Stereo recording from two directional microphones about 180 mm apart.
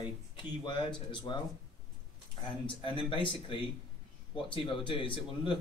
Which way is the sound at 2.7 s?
30° left (ahead or behind).